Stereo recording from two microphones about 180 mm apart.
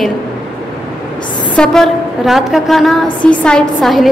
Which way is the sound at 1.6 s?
Centre (ahead or behind).